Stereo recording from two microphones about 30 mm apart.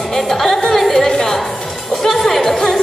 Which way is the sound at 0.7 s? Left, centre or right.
Centre.